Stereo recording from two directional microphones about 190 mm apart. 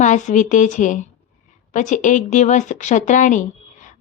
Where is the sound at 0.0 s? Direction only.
40° left (ahead or behind).